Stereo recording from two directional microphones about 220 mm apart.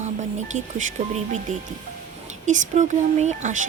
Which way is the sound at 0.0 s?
35° right (ahead or behind).